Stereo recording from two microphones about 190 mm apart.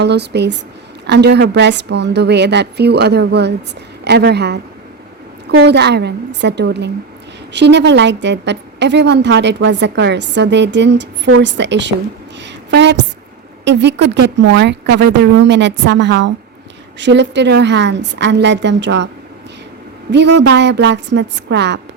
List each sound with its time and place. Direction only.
0.0 s a woman's voice: 60° right (ahead or behind)
20.1 s speech: 65° right (ahead or behind)